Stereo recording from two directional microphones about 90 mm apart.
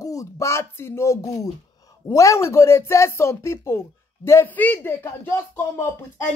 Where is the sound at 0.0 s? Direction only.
40° left (ahead or behind); by 5.3 s 20° left (ahead or behind).